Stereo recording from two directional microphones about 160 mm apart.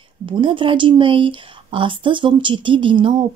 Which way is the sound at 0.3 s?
30° right (ahead or behind).